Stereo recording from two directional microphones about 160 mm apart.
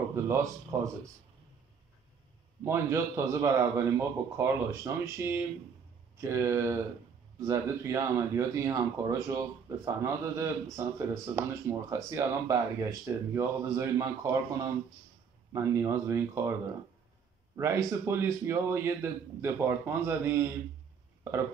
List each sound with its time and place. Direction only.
0.1 s a man's voice: 15° right (ahead or behind)
2.6 s a man's voice: 15° right (ahead or behind)
17.6 s a man's voice: 15° right (ahead or behind)
21.2 s burping: 15° right (ahead or behind)